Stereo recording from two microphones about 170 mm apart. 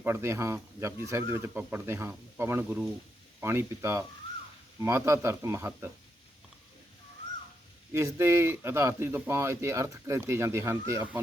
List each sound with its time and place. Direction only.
0.0 s speech: 15° right (ahead or behind)
7.9 s speech: 15° right (ahead or behind)